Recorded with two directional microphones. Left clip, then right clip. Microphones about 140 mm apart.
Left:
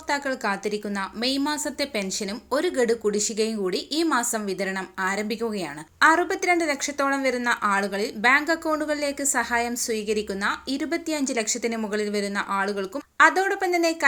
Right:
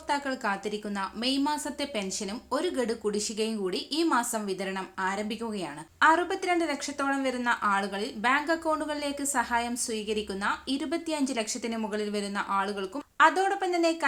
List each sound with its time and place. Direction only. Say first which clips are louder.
0.1 s a woman's voice: left 4 dB; 20° left (ahead or behind)